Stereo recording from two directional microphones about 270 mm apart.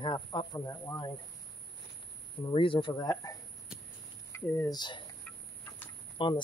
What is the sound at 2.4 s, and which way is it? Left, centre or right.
Speech, centre.